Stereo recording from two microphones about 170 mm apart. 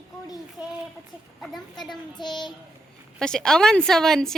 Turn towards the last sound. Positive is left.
turn(degrees=5)  # may be behind; listen again after turning